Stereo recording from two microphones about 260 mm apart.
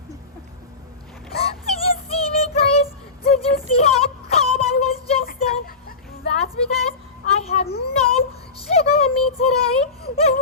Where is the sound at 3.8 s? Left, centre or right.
Left.